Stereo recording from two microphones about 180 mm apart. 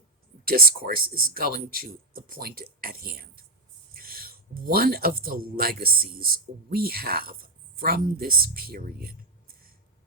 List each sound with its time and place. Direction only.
0.4 s speech: 55° right (ahead or behind)